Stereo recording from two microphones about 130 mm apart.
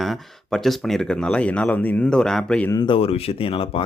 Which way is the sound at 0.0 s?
Centre (ahead or behind).